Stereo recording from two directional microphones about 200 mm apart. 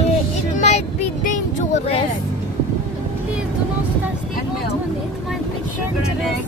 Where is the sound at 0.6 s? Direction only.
35° left (ahead or behind).